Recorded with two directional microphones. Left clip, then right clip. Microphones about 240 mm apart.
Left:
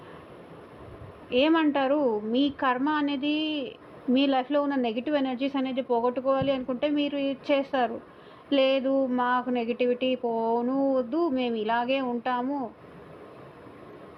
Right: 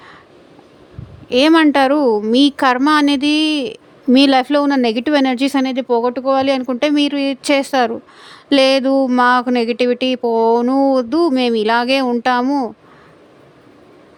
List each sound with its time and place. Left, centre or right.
1.3 s a woman's voice: right